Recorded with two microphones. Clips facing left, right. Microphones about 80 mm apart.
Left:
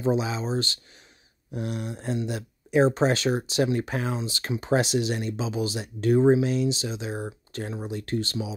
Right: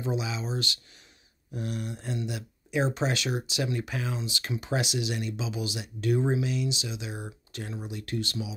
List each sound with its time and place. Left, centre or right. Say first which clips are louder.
0.0 s speech: left 6 dB; left